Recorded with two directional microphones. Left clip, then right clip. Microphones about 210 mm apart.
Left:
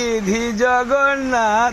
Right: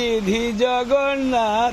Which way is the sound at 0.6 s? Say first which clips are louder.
Left 4 dB; 5° right (ahead or behind).